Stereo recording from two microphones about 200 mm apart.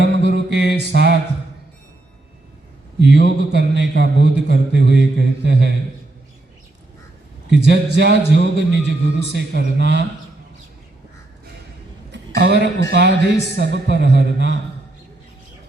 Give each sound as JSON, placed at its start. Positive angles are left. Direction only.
{"t": 0.3, "sound": "mantra", "side_deg": -55}
{"t": 3.0, "sound": "a man's voice", "side_deg": -60}
{"t": 7.5, "sound": "a man's voice", "side_deg": -60}
{"t": 12.1, "sound": "a sound", "side_deg": -60}
{"t": 12.6, "sound": "a man's voice", "side_deg": -55}